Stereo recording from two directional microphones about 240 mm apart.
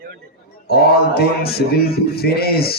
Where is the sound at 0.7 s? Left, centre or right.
Left.